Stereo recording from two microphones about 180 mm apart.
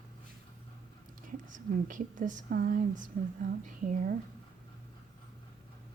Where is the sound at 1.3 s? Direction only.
45° right (ahead or behind).